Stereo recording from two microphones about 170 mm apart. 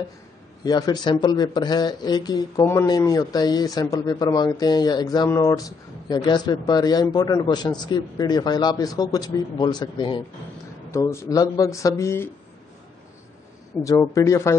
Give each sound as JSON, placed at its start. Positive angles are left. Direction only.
{"t": 0.7, "sound": "speech", "side_deg": 25}
{"t": 2.6, "sound": "speech", "side_deg": 15}
{"t": 10.9, "sound": "speech", "side_deg": 15}
{"t": 13.8, "sound": "speech", "side_deg": 20}